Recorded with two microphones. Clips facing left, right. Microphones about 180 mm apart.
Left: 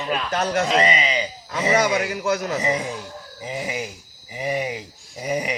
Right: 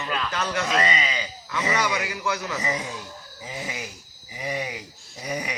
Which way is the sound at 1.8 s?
45° left (ahead or behind).